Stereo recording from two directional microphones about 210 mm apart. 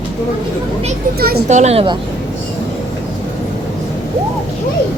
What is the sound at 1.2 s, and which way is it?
Speech, 45° right (ahead or behind).